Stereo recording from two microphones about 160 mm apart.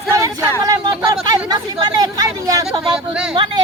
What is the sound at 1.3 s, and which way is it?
Chatter, 25° right (ahead or behind).